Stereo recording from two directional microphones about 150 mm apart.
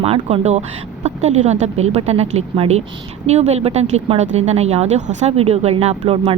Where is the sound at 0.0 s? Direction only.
40° right (ahead or behind).